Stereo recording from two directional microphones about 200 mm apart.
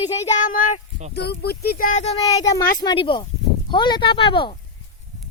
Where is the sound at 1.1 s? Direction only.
55° left (ahead or behind); by 2.1 s 40° left (ahead or behind).